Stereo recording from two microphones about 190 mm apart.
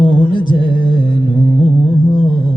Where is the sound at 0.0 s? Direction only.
25° right (ahead or behind).